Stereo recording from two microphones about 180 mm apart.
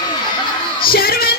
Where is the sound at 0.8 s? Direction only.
55° left (ahead or behind).